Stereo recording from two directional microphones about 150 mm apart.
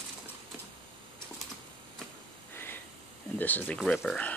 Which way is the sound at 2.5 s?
15° left (ahead or behind).